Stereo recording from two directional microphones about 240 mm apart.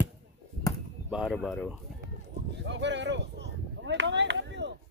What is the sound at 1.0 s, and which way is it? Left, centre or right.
Speech, centre.